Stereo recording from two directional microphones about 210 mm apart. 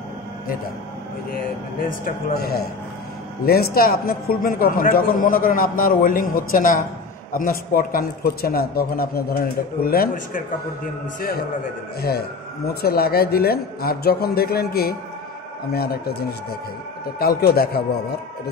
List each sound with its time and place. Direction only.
1.9 s a man's voice: 45° left (ahead or behind)